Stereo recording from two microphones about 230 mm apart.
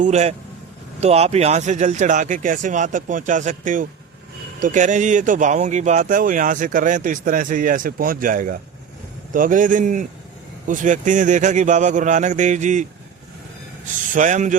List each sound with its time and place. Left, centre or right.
0.0 s a man's voice: right
13.8 s speech: right